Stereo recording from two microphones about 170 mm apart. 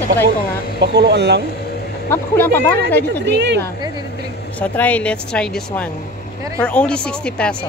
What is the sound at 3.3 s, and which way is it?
Speech, 90° right.